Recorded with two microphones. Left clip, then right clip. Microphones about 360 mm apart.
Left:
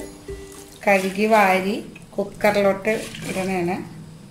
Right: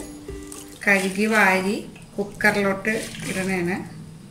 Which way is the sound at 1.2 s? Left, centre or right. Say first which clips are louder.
Left 2 dB; centre.